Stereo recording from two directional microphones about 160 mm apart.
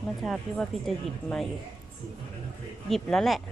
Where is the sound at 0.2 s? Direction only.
Centre (ahead or behind).